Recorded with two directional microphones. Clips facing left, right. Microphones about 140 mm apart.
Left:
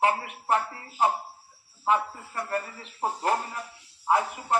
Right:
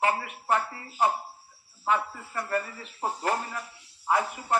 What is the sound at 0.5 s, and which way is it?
A man's voice, 25° left (ahead or behind).